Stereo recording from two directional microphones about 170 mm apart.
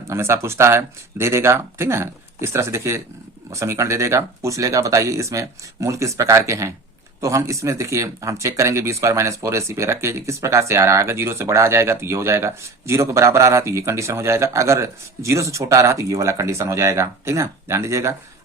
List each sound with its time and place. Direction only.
0.1 s speech: 15° right (ahead or behind)